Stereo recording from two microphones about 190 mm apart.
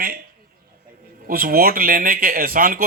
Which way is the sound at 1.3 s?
50° right (ahead or behind).